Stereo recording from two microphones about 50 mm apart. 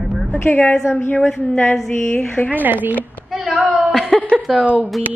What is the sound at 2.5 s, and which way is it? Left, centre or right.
A man's voice, right.